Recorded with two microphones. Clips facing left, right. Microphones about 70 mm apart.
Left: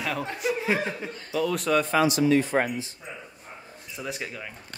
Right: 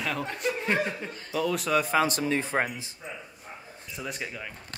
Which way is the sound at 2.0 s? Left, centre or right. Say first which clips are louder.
Left 4 dB; right.